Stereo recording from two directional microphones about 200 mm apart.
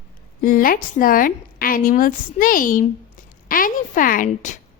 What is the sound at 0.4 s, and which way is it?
A woman's voice, 45° left (ahead or behind).